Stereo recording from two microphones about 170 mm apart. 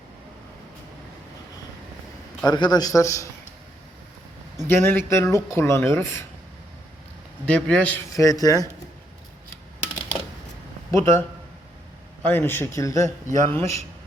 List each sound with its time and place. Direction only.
2.4 s a man's voice: 25° left (ahead or behind)
4.7 s speech: 10° left (ahead or behind)
7.4 s speech: 10° left (ahead or behind)
8.1 s a man's voice: 20° left (ahead or behind)
10.9 s speech: 15° left (ahead or behind)